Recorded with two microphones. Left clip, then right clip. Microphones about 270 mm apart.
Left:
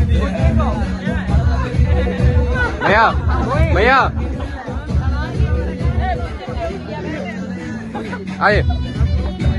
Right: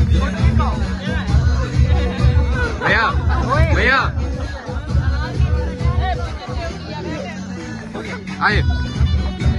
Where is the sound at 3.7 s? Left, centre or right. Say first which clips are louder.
Left 4 dB; centre.